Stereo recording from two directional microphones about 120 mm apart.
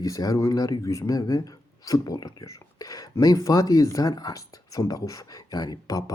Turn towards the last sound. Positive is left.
turn(degrees=30)  # may be behind; listen again after turning